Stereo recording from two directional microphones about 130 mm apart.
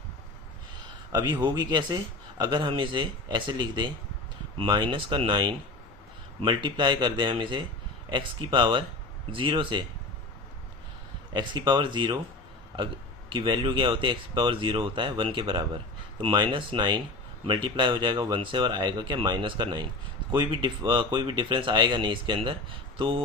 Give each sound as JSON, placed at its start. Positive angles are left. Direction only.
{"t": 1.1, "sound": "speech", "side_deg": -35}
{"t": 11.3, "sound": "speech", "side_deg": -35}
{"t": 13.3, "sound": "speech", "side_deg": -40}